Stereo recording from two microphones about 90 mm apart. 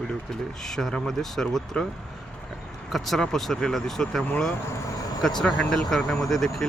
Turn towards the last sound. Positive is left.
turn(degrees=5)  # may be behind; listen again after turning